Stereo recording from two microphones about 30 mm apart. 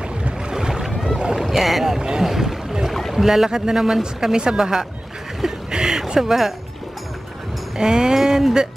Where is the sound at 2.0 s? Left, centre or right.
Right.